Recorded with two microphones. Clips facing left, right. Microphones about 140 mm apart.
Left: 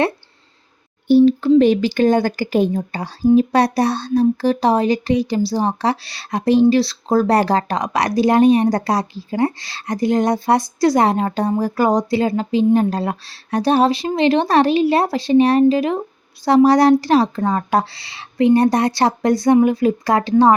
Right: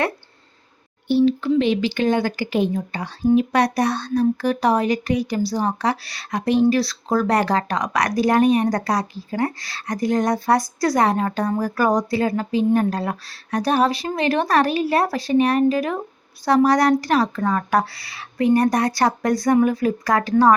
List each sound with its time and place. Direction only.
1.0 s a woman's voice: 40° left (ahead or behind); by 20.3 s 25° left (ahead or behind)